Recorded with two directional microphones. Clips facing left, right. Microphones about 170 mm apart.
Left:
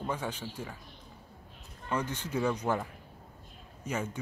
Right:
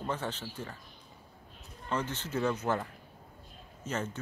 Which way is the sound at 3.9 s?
10° left (ahead or behind).